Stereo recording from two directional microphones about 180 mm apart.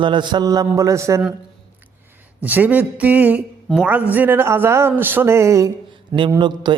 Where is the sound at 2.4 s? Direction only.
10° right (ahead or behind); by 6.8 s 25° right (ahead or behind).